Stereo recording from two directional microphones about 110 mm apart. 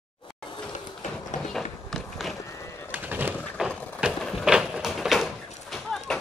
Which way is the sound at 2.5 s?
25° left (ahead or behind).